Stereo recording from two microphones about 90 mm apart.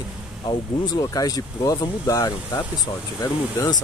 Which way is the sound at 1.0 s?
40° left (ahead or behind).